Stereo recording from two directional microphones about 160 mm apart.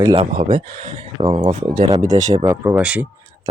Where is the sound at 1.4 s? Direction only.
45° right (ahead or behind).